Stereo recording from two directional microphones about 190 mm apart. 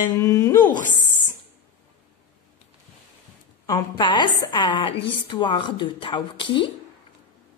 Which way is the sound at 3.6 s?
20° left (ahead or behind).